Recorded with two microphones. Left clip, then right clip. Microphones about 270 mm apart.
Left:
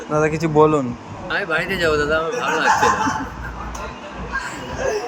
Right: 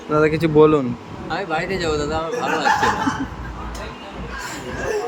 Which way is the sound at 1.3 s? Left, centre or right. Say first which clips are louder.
Left 2 dB; centre.